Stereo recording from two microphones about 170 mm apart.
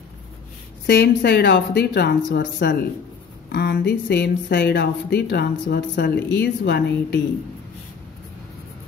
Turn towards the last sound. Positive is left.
turn(degrees=70)  # may be behind; listen again after turning